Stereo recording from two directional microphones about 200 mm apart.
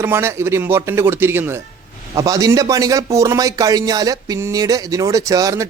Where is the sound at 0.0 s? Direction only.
10° right (ahead or behind).